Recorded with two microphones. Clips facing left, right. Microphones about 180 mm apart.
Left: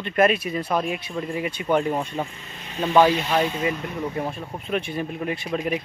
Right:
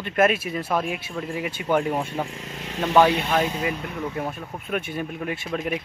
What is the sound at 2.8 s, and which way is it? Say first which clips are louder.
Speech: left 1 dB; 5° right (ahead or behind).